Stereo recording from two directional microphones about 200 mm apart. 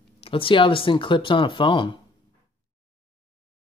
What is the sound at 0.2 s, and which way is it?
Speech, 25° left (ahead or behind).